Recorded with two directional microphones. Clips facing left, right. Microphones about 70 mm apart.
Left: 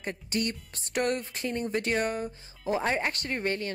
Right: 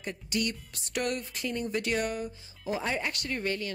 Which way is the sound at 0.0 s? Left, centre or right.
Left.